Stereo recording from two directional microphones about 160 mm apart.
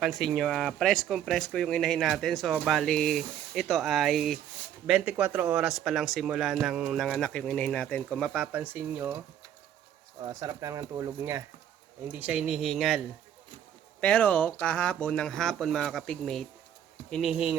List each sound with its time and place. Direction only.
0.0 s speech: centre (ahead or behind)
10.2 s speech: 25° right (ahead or behind); by 13.0 s centre (ahead or behind)
14.0 s speech: 10° left (ahead or behind)